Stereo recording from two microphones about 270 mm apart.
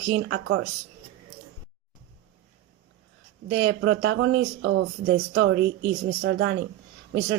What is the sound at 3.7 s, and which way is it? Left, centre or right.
Speech, right.